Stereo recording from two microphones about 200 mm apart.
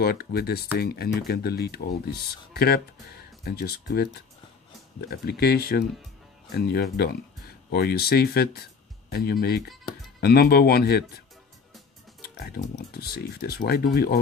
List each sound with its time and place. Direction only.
0.0 s speech: 50° left (ahead or behind)